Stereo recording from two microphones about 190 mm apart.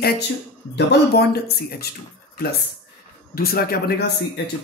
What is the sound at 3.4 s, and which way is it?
Speech, 55° left (ahead or behind).